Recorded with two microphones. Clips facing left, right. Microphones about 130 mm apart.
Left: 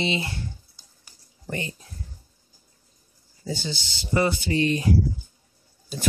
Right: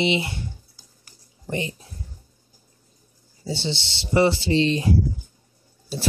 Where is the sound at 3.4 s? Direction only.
25° right (ahead or behind).